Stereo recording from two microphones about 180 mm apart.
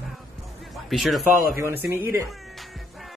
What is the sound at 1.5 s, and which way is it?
Speech, 10° right (ahead or behind).